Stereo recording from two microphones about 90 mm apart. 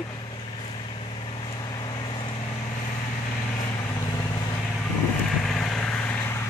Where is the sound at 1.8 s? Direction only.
60° left (ahead or behind).